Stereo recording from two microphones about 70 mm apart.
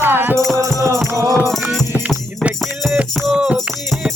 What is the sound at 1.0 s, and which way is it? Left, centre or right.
Music, right.